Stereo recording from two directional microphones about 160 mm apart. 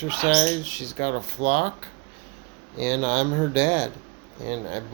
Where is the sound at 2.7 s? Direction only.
35° right (ahead or behind).